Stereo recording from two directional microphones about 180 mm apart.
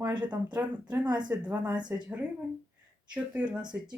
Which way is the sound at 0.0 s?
25° right (ahead or behind).